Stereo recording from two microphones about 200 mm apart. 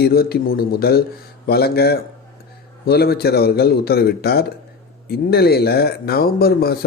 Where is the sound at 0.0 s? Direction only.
50° left (ahead or behind).